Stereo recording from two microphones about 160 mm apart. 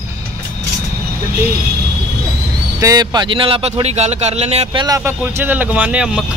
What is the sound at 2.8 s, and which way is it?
Speech, 25° right (ahead or behind).